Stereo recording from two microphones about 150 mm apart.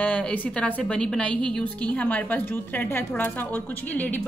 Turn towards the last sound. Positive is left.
turn(degrees=10)  # may be behind; listen again after turning